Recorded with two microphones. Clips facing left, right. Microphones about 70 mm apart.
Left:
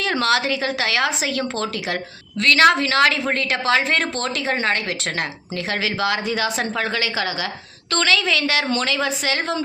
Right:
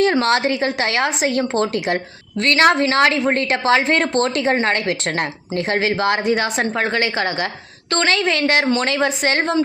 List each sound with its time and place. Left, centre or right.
0.0 s a woman's voice: right